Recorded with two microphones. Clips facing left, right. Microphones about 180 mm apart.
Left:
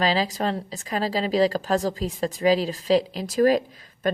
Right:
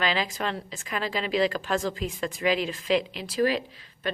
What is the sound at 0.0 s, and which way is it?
Speech, 35° left (ahead or behind).